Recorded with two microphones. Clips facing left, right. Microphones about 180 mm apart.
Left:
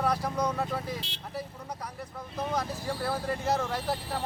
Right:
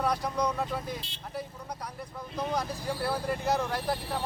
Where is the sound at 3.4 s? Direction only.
Centre (ahead or behind).